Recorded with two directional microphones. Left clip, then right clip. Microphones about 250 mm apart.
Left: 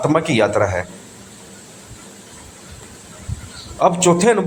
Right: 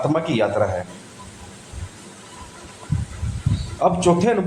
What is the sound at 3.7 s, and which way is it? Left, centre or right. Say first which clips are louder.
Speech: left 3 dB; left.